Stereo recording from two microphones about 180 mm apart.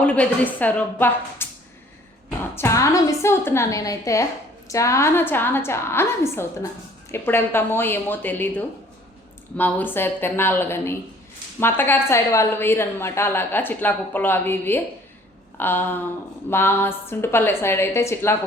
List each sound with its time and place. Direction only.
0.0 s a woman's voice: 5° left (ahead or behind)